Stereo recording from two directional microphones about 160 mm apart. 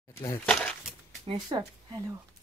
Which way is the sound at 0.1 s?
20° left (ahead or behind).